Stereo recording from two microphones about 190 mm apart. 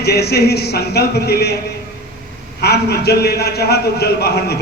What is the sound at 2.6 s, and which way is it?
A man's voice, 60° left (ahead or behind).